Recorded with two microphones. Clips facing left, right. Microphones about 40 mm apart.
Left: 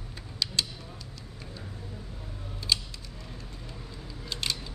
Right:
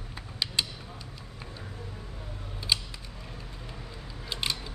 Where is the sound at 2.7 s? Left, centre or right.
Centre.